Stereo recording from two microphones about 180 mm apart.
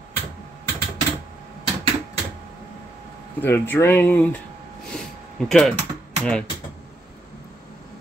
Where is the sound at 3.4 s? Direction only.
10° left (ahead or behind).